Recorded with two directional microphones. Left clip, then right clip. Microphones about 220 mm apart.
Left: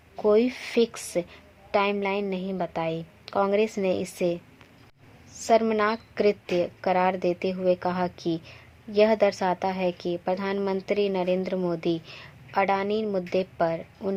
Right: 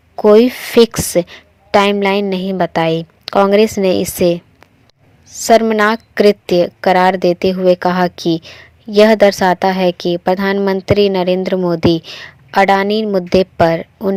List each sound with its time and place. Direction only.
0.2 s a woman's voice: 30° right (ahead or behind)